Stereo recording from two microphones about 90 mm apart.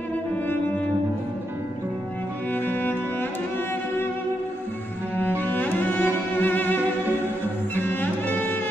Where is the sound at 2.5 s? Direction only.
20° left (ahead or behind).